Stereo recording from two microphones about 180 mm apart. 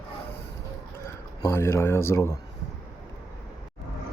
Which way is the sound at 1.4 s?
15° left (ahead or behind).